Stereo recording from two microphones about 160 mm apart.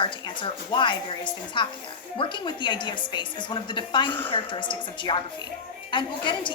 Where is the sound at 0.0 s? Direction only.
30° left (ahead or behind).